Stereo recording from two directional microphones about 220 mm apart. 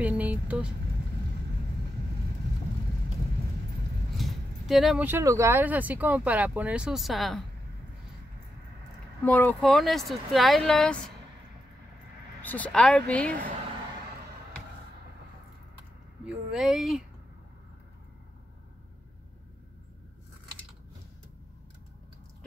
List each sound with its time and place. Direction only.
0.0 s vehicle: 5° right (ahead or behind)
4.2 s speech: centre (ahead or behind)
9.2 s speech: 10° left (ahead or behind)
12.4 s speech: 5° left (ahead or behind)
16.3 s speech: centre (ahead or behind)